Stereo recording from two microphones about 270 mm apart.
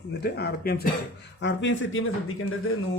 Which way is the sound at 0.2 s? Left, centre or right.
Left.